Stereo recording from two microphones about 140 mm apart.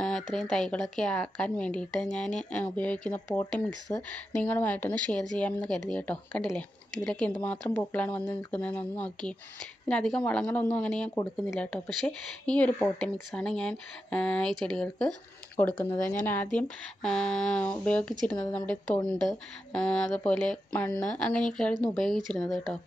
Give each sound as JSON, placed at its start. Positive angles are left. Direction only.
{"t": 0.0, "sound": "speech", "side_deg": 5}